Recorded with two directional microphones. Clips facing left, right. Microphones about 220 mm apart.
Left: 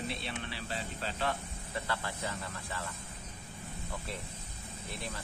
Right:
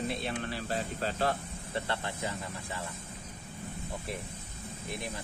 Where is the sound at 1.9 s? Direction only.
20° right (ahead or behind).